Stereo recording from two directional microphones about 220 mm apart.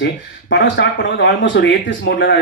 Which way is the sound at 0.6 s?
55° left (ahead or behind).